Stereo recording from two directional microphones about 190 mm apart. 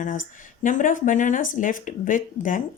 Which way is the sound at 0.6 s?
45° left (ahead or behind).